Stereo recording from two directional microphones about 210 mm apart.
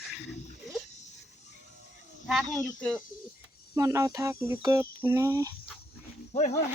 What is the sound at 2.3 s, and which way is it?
Speech, centre (ahead or behind).